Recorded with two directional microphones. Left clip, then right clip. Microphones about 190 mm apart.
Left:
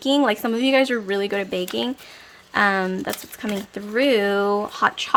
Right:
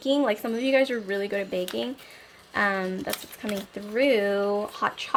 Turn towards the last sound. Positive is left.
turn(degrees=25)  # may be behind; listen again after turning